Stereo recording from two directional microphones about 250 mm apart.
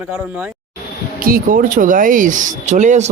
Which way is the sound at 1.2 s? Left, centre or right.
Right.